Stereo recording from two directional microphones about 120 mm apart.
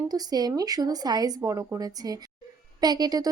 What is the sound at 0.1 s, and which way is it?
A woman's voice, 30° right (ahead or behind).